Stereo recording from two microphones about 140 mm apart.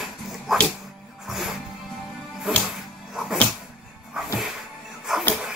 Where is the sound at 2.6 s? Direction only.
Centre (ahead or behind).